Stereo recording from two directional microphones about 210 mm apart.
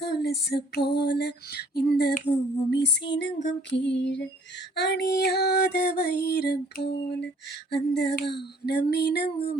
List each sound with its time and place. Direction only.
0.0 s female singing: 50° left (ahead or behind)